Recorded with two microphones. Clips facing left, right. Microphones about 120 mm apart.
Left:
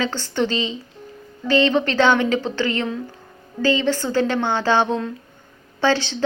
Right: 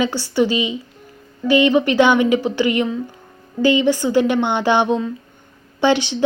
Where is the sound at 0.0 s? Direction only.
10° right (ahead or behind).